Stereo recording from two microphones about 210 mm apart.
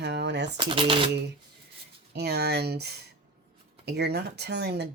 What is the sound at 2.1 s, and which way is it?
Speech, 50° right (ahead or behind).